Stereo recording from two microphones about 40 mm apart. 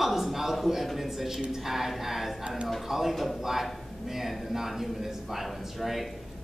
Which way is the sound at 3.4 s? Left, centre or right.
Centre.